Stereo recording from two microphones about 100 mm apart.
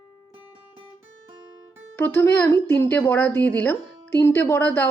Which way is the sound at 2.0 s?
20° left (ahead or behind).